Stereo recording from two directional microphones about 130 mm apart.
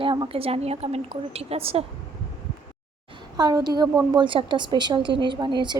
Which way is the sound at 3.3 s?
30° right (ahead or behind).